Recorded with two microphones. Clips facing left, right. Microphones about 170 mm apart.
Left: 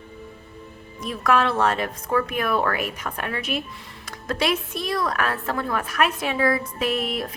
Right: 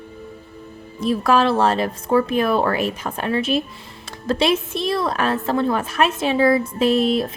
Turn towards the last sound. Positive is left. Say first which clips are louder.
# right 8 dB
turn(degrees=-30)  # may be behind; listen again after turning